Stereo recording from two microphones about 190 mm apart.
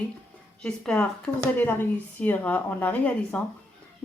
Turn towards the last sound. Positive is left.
turn(degrees=5)  # may be behind; listen again after turning